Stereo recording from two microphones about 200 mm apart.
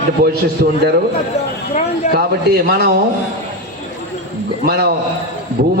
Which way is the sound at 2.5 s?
50° right (ahead or behind).